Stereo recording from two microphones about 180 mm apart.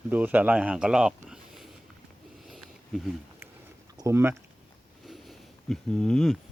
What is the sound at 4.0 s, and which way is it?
Speech, 15° right (ahead or behind).